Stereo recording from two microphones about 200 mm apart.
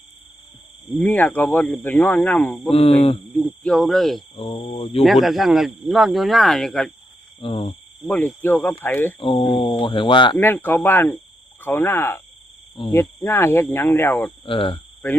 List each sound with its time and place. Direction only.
0.9 s speech: 10° left (ahead or behind)
2.6 s speech: 30° left (ahead or behind)
3.3 s speech: 5° left (ahead or behind)
4.4 s speech: 25° left (ahead or behind)
5.0 s speech: centre (ahead or behind)
7.4 s speech: 30° left (ahead or behind)
8.0 s speech: 10° left (ahead or behind)
9.1 s speech: 25° left (ahead or behind)
10.3 s speech: 10° left (ahead or behind)
14.4 s speech: 25° left (ahead or behind)